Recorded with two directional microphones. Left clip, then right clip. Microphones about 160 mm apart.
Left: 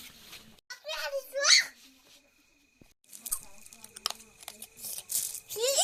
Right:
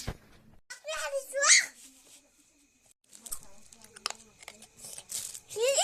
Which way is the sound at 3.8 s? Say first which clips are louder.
Left 2 dB; 20° right (ahead or behind).